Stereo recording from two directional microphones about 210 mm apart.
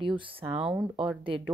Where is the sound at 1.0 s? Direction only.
25° right (ahead or behind).